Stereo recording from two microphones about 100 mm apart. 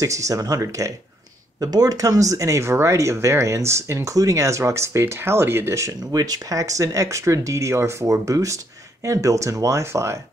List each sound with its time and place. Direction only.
0.0 s speech: 35° right (ahead or behind)